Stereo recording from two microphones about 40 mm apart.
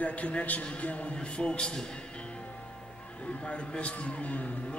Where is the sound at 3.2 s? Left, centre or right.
Left.